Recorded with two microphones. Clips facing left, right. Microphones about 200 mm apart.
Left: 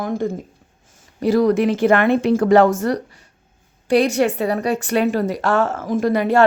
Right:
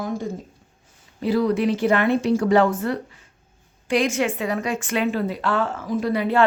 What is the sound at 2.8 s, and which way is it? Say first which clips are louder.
A woman's voice: left 4 dB; 40° left (ahead or behind).